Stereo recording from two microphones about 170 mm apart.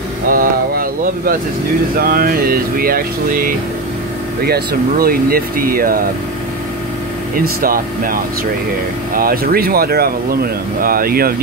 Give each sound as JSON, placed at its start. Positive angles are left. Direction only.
{"t": 0.3, "sound": "a sound", "side_deg": -55}
{"t": 2.0, "sound": "speech", "side_deg": -60}
{"t": 7.3, "sound": "speech", "side_deg": -55}